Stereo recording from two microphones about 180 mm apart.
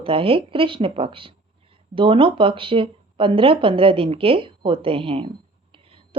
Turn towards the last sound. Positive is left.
turn(degrees=-30)  # may be behind; listen again after turning